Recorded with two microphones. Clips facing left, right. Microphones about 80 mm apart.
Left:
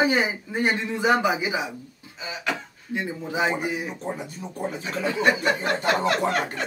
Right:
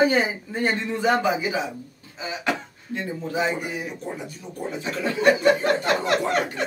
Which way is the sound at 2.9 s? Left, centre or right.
Centre.